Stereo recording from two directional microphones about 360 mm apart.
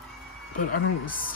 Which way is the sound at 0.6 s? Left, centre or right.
Left.